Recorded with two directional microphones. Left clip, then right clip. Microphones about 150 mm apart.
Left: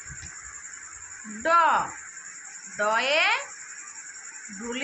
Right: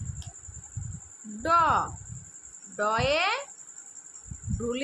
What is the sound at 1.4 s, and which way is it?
A woman's voice, 90° right.